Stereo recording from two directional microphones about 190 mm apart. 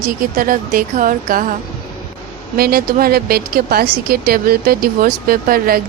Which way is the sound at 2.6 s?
50° right (ahead or behind).